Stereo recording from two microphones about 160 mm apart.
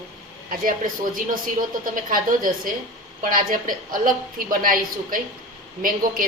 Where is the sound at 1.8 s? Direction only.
60° right (ahead or behind).